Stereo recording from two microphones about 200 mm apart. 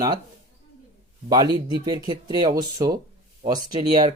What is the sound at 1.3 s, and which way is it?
Speech, 20° right (ahead or behind).